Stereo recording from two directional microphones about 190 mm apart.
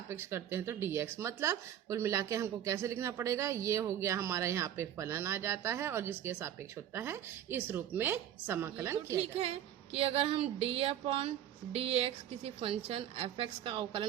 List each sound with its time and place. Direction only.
0.1 s speech: 10° right (ahead or behind)
9.1 s a woman's voice: 30° right (ahead or behind)